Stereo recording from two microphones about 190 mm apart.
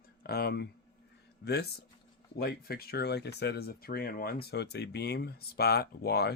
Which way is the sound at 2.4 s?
55° left (ahead or behind).